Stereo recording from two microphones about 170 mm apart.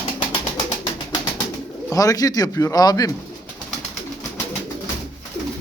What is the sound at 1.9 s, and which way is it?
Speech, 20° left (ahead or behind).